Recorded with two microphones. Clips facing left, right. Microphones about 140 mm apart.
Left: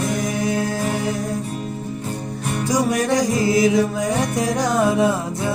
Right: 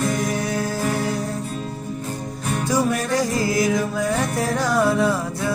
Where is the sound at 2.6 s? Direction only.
15° left (ahead or behind).